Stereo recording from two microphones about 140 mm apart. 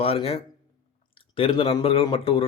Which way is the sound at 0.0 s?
45° left (ahead or behind).